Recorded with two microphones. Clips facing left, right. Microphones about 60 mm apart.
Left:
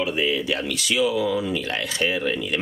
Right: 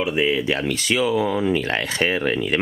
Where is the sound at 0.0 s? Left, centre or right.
Right.